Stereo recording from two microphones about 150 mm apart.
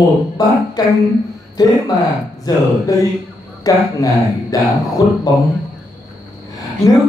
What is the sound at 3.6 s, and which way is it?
Speech, 25° left (ahead or behind).